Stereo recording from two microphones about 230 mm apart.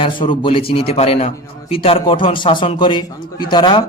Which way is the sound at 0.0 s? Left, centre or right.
Left.